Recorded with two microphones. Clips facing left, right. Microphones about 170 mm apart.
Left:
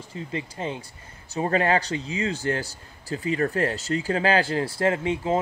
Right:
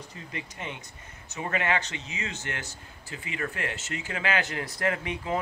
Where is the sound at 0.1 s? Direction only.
30° left (ahead or behind).